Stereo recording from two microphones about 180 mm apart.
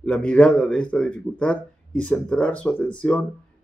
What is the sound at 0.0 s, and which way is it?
A man's voice, 5° left (ahead or behind).